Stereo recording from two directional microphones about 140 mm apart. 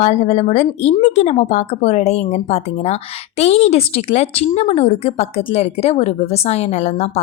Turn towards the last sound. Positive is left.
turn(degrees=50)  # may be behind; listen again after turning